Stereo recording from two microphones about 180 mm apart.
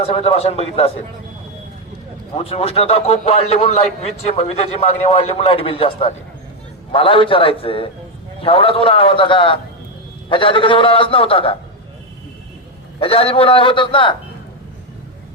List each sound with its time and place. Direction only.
0.0 s a man's voice: 35° left (ahead or behind)
2.3 s a man's voice: 35° left (ahead or behind)
13.0 s a man's voice: 30° left (ahead or behind)